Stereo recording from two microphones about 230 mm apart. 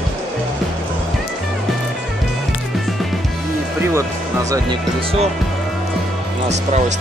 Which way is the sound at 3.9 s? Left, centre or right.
Centre.